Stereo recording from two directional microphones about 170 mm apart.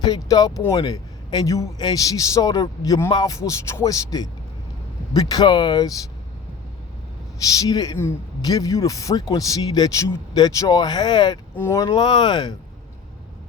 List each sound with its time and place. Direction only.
0.0 s a man's voice: 25° left (ahead or behind)
7.4 s a man's voice: 20° left (ahead or behind)
11.9 s a man's voice: 25° left (ahead or behind)